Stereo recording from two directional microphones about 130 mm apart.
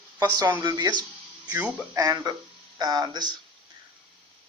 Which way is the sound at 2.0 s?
30° right (ahead or behind).